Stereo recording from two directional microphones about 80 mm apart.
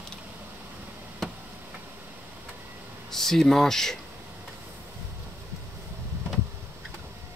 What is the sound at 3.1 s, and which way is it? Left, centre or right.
Speech, centre.